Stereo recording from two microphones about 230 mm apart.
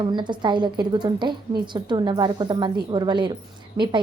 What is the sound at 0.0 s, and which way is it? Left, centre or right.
A woman's voice, centre.